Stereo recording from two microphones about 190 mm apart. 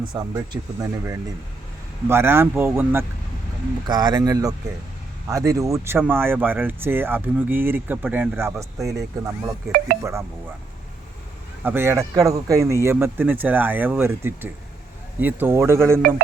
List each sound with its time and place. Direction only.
0.1 s speech: 20° right (ahead or behind)
11.6 s speech: 10° right (ahead or behind)